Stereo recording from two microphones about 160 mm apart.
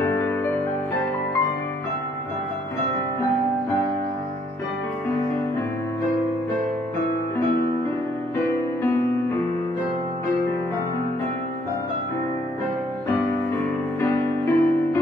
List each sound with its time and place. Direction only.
0.0 s music: 15° left (ahead or behind)
14.0 s music: 15° left (ahead or behind)